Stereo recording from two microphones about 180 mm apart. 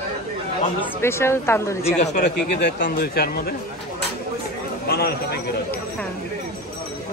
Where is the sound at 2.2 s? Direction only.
70° left (ahead or behind).